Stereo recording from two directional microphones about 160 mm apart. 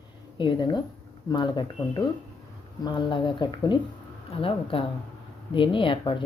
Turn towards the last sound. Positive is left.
turn(degrees=30)  # may be behind; listen again after turning